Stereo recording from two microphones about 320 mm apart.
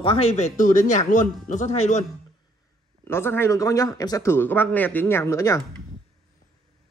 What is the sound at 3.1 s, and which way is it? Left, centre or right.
Speech, centre.